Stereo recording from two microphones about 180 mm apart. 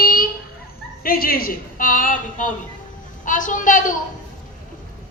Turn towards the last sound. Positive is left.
turn(degrees=45)  # may be behind; listen again after turning